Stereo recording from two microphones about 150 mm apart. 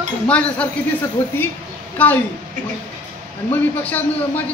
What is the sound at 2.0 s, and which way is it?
Speech, 10° left (ahead or behind).